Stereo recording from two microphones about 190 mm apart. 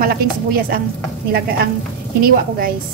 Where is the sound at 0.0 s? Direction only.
50° right (ahead or behind).